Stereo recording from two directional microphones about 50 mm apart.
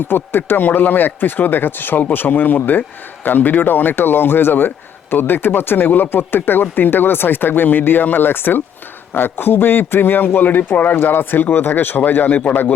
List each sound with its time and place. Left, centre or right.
0.1 s a man's voice: left